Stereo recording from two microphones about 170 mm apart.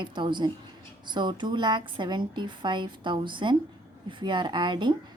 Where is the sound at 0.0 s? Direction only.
30° right (ahead or behind).